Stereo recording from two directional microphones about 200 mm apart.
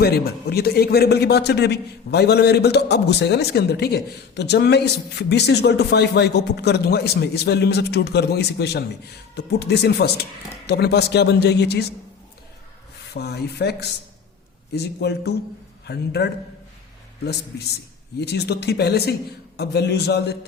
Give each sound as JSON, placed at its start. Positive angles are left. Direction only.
{"t": 0.0, "sound": "a man's voice", "side_deg": 50}
{"t": 13.1, "sound": "a man's voice", "side_deg": 55}
{"t": 17.5, "sound": "a man's voice", "side_deg": 55}